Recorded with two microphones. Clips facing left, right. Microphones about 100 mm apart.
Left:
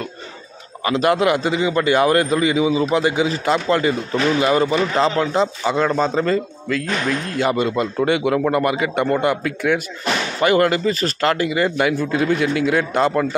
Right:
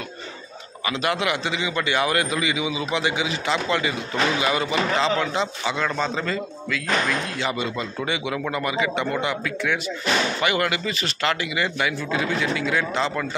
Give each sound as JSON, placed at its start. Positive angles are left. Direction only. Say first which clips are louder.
{"t": 0.8, "sound": "a man's voice", "louder": "left 7 dB", "side_deg": 45}